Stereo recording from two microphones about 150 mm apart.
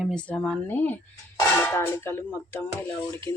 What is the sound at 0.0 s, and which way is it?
Speech, 5° left (ahead or behind).